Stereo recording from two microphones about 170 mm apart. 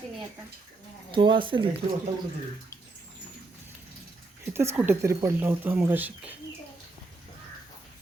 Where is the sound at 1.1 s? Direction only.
30° right (ahead or behind).